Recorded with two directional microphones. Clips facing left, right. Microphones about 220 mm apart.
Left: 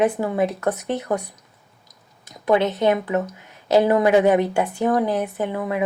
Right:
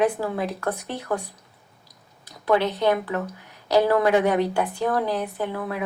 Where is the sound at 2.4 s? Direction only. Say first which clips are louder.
Left 3 dB; 20° left (ahead or behind).